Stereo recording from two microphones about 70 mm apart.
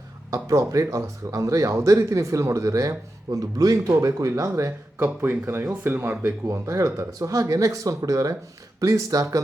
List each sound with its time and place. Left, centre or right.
0.3 s a sound: right
0.7 s speech: right
3.3 s a man's voice: right
6.5 s speech: right